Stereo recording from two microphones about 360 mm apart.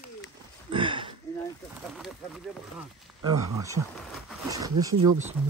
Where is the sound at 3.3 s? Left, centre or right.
Centre.